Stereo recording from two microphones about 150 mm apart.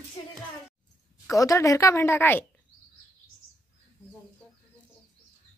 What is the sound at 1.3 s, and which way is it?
Speech, 20° left (ahead or behind).